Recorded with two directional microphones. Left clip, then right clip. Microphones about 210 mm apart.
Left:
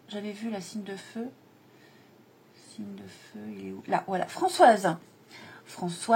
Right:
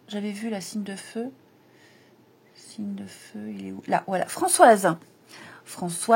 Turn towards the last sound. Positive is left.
turn(degrees=-45)  # may be behind; listen again after turning